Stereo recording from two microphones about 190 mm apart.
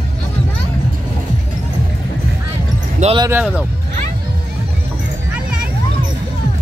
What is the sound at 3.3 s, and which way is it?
Speech, 5° right (ahead or behind).